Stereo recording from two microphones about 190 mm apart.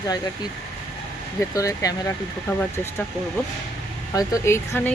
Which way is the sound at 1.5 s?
15° left (ahead or behind).